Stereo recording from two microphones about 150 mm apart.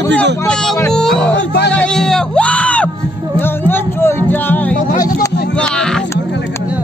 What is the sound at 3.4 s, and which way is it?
Music, 15° left (ahead or behind).